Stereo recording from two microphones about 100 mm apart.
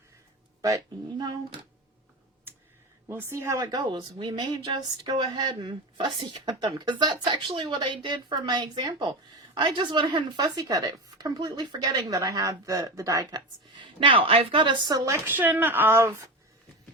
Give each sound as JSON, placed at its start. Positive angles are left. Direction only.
{"t": 3.1, "sound": "speech", "side_deg": -25}
{"t": 3.8, "sound": "speech", "side_deg": -50}
{"t": 12.0, "sound": "speech", "side_deg": -35}
{"t": 14.0, "sound": "speech", "side_deg": -65}
{"t": 14.9, "sound": "speech", "side_deg": -35}
{"t": 15.3, "sound": "speech", "side_deg": -20}